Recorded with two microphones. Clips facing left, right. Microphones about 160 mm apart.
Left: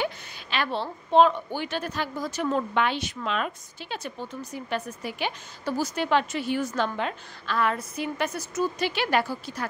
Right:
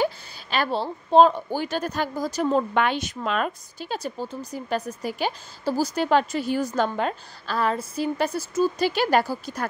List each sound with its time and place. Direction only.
0.0 s a woman's voice: 40° right (ahead or behind)
2.7 s a woman's voice: 50° right (ahead or behind)